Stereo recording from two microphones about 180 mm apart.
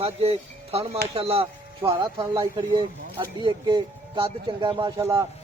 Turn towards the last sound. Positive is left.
turn(degrees=-15)  # may be behind; listen again after turning